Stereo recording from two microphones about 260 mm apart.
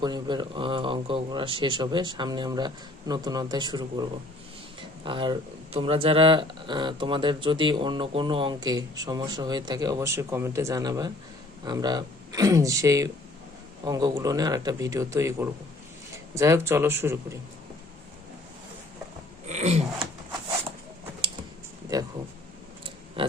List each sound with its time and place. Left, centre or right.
0.0 s speech: centre
19.5 s a sound: right
21.9 s speech: centre